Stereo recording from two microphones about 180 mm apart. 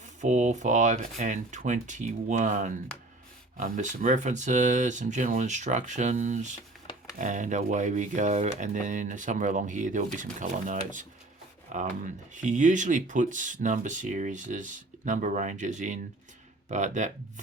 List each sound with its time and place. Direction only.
0.2 s speech: 40° right (ahead or behind)